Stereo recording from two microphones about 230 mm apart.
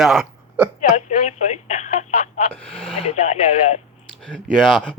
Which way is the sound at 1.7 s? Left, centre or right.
Left.